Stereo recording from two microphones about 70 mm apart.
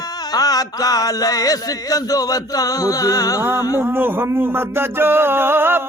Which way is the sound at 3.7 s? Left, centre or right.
Right.